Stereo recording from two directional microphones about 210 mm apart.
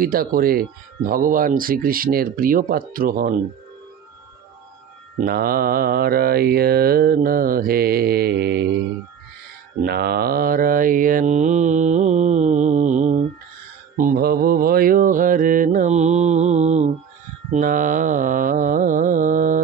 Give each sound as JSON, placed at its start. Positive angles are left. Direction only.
{"t": 0.0, "sound": "mantra", "side_deg": -45}
{"t": 5.2, "sound": "mantra", "side_deg": -45}
{"t": 9.8, "sound": "mantra", "side_deg": -50}
{"t": 17.5, "sound": "carnatic music", "side_deg": -40}